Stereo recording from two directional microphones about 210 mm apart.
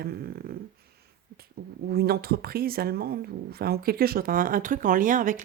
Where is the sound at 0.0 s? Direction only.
45° right (ahead or behind).